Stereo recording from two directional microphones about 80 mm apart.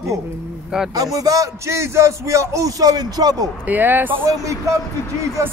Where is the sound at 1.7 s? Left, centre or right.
Right.